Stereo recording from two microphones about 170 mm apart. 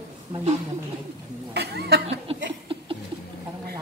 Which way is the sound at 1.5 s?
75° right (ahead or behind).